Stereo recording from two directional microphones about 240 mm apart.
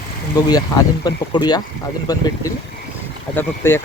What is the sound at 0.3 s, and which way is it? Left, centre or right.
Speech, centre.